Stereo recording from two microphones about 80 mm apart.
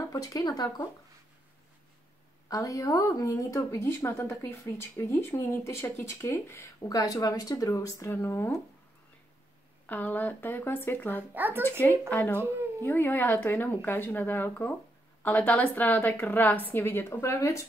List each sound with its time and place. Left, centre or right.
0.1 s speech: left
2.4 s a woman's voice: left
6.9 s speech: left
8.2 s a woman's voice: left
9.8 s a woman's voice: left
11.3 s speech: right
12.1 s a woman's voice: left